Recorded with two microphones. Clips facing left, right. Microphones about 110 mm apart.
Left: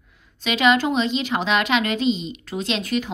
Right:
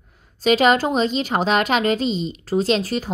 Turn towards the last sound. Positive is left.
turn(degrees=-35)  # may be behind; listen again after turning